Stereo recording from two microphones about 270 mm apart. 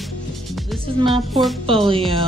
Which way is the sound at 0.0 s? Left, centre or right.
Centre.